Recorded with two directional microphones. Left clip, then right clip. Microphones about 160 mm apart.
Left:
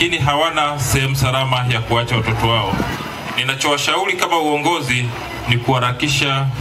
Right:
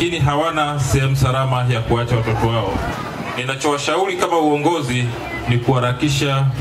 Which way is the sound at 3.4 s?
25° left (ahead or behind).